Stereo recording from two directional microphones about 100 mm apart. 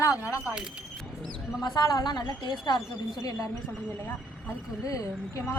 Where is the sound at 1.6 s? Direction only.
45° left (ahead or behind).